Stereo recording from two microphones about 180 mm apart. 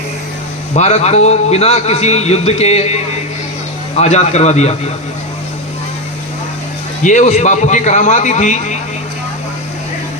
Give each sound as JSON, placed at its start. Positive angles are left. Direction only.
{"t": 0.8, "sound": "a man's voice", "side_deg": 40}
{"t": 7.0, "sound": "a man's voice", "side_deg": 40}